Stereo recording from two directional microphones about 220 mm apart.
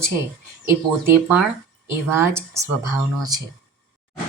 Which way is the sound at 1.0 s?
5° right (ahead or behind).